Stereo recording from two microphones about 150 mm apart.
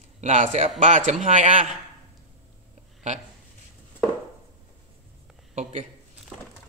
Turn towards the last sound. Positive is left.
turn(degrees=-50)  # may be behind; listen again after turning